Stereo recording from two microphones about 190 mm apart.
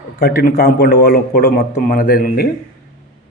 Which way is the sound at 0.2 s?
55° left (ahead or behind).